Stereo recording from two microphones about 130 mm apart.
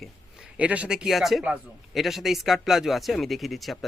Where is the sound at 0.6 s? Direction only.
10° right (ahead or behind).